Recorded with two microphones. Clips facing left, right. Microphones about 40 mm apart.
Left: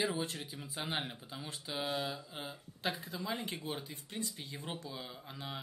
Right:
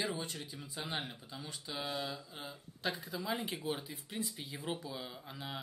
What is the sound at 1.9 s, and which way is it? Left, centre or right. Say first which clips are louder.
Mantra: left 2 dB; centre.